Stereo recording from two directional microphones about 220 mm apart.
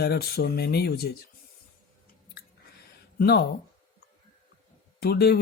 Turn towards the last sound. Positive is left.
turn(degrees=45)  # may be behind; listen again after turning